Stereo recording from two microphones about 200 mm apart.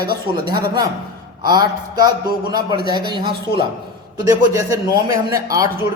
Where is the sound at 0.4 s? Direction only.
20° right (ahead or behind).